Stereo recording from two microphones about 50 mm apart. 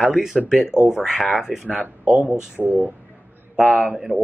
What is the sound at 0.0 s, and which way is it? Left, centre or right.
Speech, centre.